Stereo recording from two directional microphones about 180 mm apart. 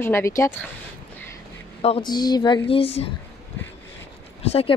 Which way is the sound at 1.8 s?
35° left (ahead or behind).